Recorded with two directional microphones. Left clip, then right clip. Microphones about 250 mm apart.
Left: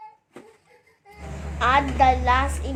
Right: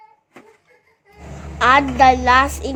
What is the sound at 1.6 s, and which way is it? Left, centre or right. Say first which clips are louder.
A woman's voice: right 6 dB; right.